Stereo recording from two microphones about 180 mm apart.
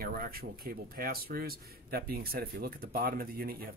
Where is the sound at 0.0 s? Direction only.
55° right (ahead or behind).